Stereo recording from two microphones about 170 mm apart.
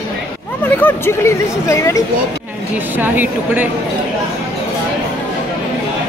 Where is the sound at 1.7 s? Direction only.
20° left (ahead or behind).